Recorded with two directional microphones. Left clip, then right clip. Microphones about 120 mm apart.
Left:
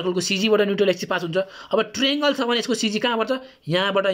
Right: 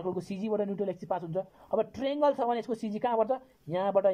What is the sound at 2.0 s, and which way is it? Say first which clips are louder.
Speech: left 3 dB; 50° right (ahead or behind).